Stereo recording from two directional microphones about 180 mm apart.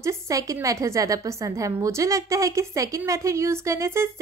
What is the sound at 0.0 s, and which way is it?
A woman's voice, 20° right (ahead or behind).